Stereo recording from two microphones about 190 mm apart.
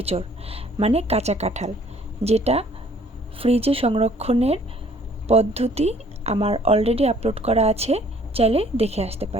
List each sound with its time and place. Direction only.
0.0 s a woman's voice: 30° right (ahead or behind)